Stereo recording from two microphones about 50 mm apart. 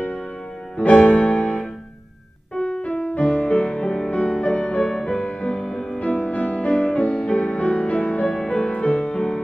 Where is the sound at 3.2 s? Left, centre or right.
Left.